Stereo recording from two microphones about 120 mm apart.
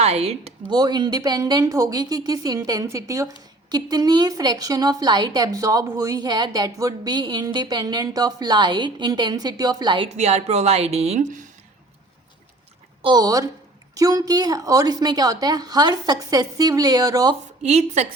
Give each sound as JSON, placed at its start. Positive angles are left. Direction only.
{"t": 0.0, "sound": "a woman's voice", "side_deg": -60}
{"t": 0.7, "sound": "a woman's voice", "side_deg": -35}
{"t": 10.1, "sound": "a woman's voice", "side_deg": -65}
{"t": 13.1, "sound": "a woman's voice", "side_deg": -30}
{"t": 17.6, "sound": "a woman's voice", "side_deg": -65}